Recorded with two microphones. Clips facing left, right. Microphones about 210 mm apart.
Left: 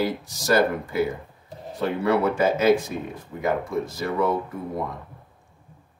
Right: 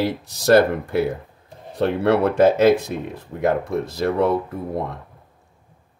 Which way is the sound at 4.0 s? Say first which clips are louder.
Right 7 dB; 65° right (ahead or behind).